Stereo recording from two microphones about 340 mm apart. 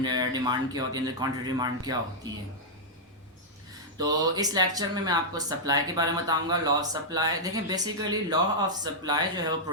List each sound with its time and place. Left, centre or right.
0.0 s speech: centre
3.9 s speech: centre